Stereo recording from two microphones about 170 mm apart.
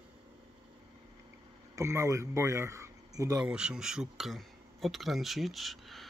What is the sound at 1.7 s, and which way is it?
Speech, 15° right (ahead or behind).